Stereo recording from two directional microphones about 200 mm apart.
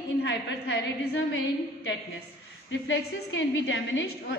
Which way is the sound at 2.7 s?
70° left (ahead or behind).